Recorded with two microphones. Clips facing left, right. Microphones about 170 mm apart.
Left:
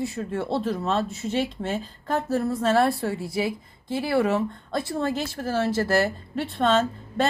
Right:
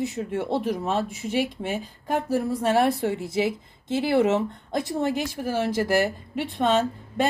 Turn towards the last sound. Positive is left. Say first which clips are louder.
# even
turn(degrees=-15)  # may be behind; listen again after turning